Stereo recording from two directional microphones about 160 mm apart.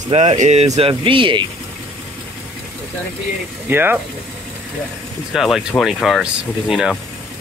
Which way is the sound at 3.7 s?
10° right (ahead or behind).